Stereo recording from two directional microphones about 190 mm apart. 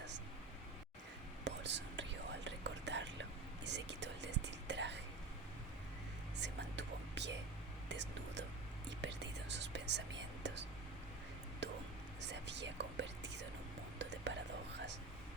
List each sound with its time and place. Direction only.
1.5 s whispering: 70° right (ahead or behind)
6.4 s whispering: 65° right (ahead or behind)
12.2 s whispering: 65° right (ahead or behind)